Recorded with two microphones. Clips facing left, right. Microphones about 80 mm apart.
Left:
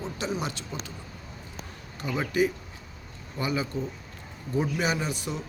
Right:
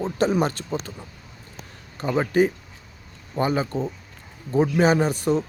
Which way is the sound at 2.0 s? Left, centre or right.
Right.